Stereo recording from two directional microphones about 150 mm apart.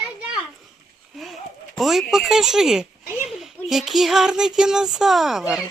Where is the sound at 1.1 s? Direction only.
Centre (ahead or behind).